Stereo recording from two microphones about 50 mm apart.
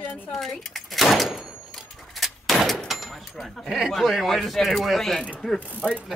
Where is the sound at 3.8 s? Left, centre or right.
Centre.